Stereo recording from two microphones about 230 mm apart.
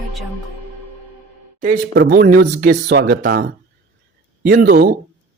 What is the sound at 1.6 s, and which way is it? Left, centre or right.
A man's voice, right.